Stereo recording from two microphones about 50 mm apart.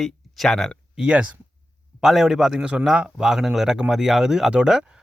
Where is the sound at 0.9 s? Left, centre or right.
Right.